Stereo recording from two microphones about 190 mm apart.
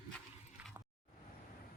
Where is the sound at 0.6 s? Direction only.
5° right (ahead or behind).